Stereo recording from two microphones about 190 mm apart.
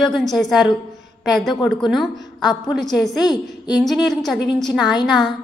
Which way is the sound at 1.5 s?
25° left (ahead or behind).